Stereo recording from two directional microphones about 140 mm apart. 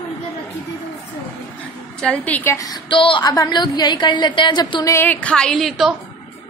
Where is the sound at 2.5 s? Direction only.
30° left (ahead or behind).